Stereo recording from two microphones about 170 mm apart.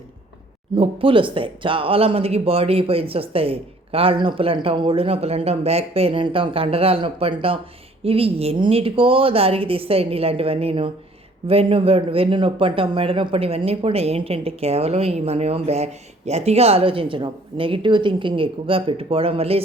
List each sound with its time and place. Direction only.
0.8 s a man's voice: 30° right (ahead or behind)